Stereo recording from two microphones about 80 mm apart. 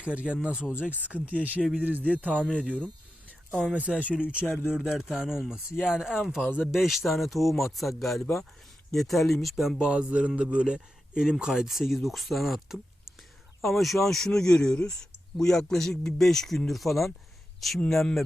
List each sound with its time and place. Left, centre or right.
0.0 s a man's voice: centre
2.4 s speech: centre
3.5 s a man's voice: centre
9.8 s a man's voice: centre